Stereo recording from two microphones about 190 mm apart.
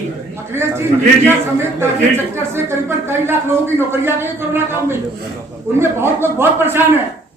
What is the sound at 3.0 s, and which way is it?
A man's voice, 10° right (ahead or behind).